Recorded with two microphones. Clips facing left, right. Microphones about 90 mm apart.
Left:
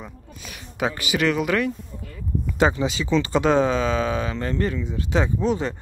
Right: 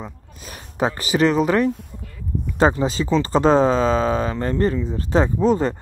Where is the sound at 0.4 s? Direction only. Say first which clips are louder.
Right 4 dB; 35° right (ahead or behind).